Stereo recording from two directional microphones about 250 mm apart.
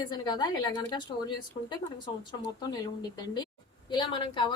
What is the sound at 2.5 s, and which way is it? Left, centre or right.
Speech, centre.